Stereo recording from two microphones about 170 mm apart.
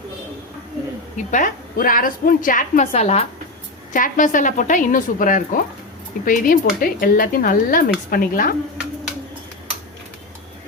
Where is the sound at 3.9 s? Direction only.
50° left (ahead or behind).